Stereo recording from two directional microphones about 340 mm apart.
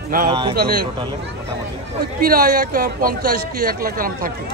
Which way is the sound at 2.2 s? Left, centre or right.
Right.